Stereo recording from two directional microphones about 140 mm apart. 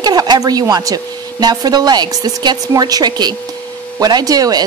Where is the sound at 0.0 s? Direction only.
30° right (ahead or behind).